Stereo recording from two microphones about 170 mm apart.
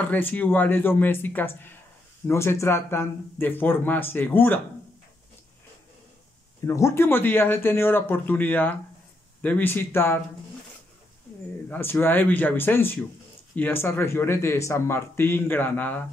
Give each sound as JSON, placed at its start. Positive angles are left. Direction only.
{"t": 0.0, "sound": "speech", "side_deg": 10}
{"t": 6.6, "sound": "speech", "side_deg": 15}
{"t": 11.7, "sound": "speech", "side_deg": 15}